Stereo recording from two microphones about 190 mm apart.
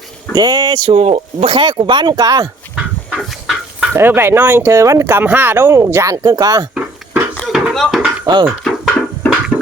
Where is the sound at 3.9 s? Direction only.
10° right (ahead or behind).